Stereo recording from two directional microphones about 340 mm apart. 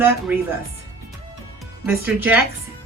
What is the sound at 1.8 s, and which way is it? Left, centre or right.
Speech, centre.